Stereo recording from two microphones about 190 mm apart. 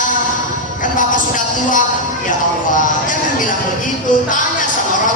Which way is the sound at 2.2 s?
45° left (ahead or behind).